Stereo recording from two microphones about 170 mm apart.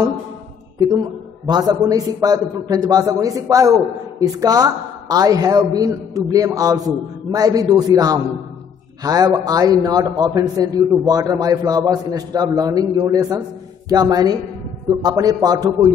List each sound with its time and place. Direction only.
0.7 s a man's voice: 25° right (ahead or behind)